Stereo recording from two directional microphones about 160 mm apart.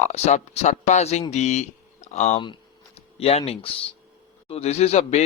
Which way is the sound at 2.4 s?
30° left (ahead or behind).